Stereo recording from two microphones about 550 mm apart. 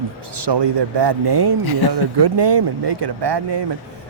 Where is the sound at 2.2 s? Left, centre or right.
Right.